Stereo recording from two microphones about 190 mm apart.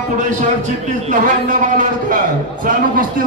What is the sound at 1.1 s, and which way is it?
A man's voice, 45° right (ahead or behind).